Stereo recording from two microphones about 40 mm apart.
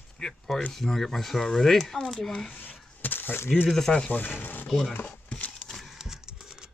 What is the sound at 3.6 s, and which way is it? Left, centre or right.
Speech, centre.